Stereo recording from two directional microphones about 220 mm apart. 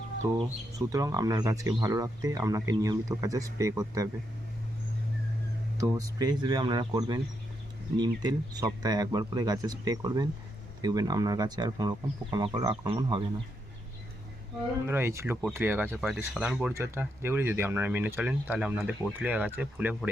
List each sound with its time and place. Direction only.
0.4 s speech: 15° right (ahead or behind)
5.7 s speech: 15° right (ahead or behind)
14.8 s speech: 10° right (ahead or behind)